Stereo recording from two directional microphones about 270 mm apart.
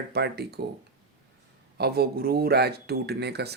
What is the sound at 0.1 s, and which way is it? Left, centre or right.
Speech, right.